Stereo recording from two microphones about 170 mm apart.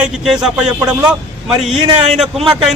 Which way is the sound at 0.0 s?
5° right (ahead or behind).